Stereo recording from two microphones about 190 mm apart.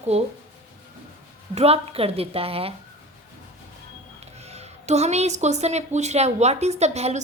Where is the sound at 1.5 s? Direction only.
30° right (ahead or behind).